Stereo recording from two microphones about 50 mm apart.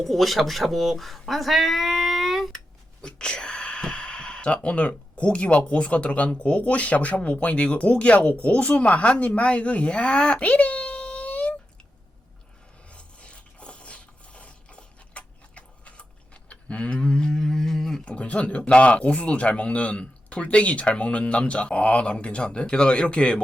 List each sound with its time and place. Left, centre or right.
0.0 s speech: centre
3.0 s speech: centre
12.9 s a sound: left
18.0 s speech: left